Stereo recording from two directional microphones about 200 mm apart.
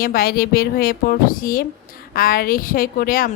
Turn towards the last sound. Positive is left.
turn(degrees=45)  # may be behind; listen again after turning